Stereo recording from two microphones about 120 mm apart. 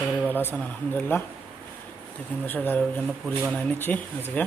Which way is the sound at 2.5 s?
15° left (ahead or behind).